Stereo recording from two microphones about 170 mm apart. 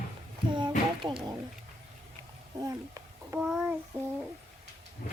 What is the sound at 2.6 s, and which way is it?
Speech, 20° right (ahead or behind).